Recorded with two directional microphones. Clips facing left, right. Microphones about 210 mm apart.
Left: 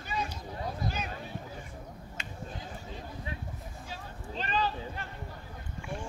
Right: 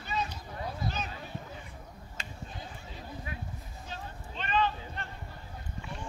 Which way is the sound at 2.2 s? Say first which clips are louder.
Right 1 dB; 35° right (ahead or behind).